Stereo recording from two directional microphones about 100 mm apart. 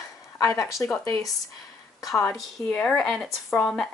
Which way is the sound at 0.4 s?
30° left (ahead or behind).